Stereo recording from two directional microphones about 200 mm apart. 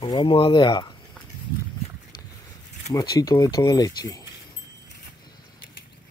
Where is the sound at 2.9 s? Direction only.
20° left (ahead or behind).